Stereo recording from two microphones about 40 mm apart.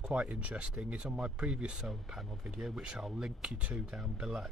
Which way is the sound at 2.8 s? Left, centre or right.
Centre.